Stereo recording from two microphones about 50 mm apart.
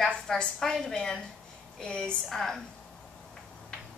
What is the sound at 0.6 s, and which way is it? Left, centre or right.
A woman's voice, centre.